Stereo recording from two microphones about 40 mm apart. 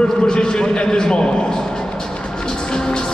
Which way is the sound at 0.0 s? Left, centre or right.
Centre.